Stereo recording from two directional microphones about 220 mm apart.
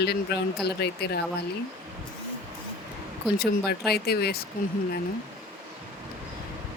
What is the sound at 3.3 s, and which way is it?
Speech, 45° left (ahead or behind).